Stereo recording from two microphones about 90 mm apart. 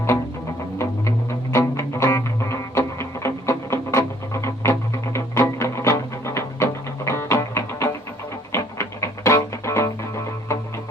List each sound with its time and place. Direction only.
0.8 s music: 30° left (ahead or behind)